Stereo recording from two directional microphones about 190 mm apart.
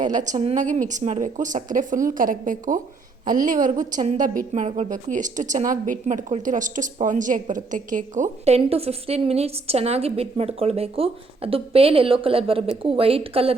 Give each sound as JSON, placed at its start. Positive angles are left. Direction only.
{"t": 0.0, "sound": "a woman's voice", "side_deg": -40}